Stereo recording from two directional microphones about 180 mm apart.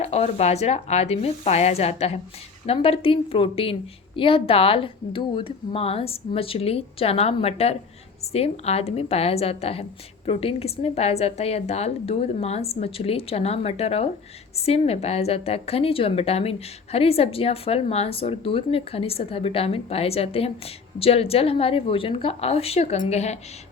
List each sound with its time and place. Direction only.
0.0 s a woman's voice: 35° left (ahead or behind)